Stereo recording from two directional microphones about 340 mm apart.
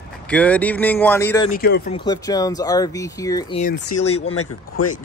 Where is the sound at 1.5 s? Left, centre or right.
Left.